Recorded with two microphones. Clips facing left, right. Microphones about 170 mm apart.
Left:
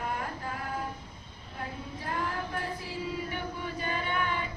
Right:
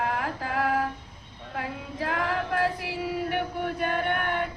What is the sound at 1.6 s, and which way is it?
Female singing, 85° right.